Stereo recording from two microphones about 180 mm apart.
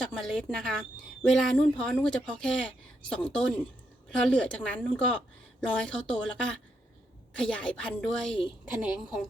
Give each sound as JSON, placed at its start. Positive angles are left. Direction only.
{"t": 0.0, "sound": "a woman's voice", "side_deg": 0}